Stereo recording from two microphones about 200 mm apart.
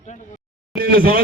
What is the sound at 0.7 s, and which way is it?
Speech, 45° right (ahead or behind).